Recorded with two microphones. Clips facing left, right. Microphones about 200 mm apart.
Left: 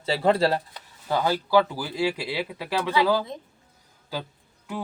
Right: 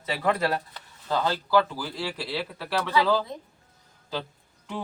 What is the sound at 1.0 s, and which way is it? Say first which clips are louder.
Speech: left 2 dB; 10° left (ahead or behind).